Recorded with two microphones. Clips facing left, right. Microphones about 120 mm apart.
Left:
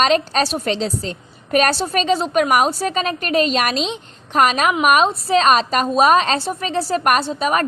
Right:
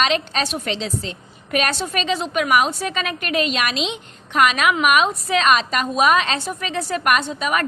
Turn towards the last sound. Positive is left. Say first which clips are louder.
# left 3 dB
turn(degrees=35)  # may be behind; listen again after turning